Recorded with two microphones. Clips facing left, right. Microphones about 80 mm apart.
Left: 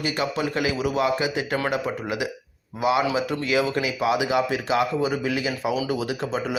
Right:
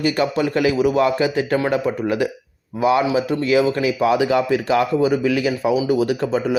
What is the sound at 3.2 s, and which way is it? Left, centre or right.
A man's voice, right.